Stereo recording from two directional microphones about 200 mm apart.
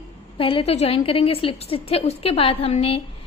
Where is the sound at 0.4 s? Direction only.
25° left (ahead or behind).